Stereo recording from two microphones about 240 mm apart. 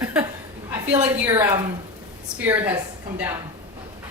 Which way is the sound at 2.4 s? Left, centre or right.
Centre.